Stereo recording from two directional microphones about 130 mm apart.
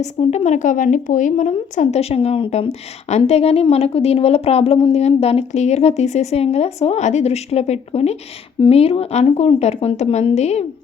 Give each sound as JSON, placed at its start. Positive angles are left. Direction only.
{"t": 0.0, "sound": "speech", "side_deg": 55}